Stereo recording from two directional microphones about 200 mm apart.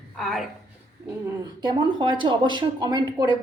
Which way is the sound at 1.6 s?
20° right (ahead or behind).